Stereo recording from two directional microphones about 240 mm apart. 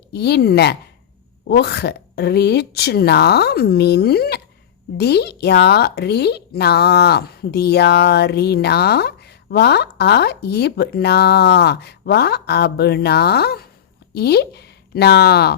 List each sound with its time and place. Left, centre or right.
0.1 s speech: left